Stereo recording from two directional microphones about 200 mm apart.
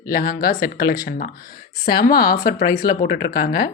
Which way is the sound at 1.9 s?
50° left (ahead or behind).